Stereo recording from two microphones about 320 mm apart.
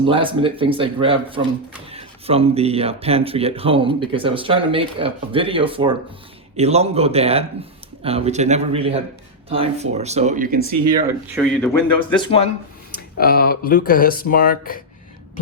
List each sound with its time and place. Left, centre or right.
0.0 s speech: centre
11.3 s speech: centre
13.0 s speech: left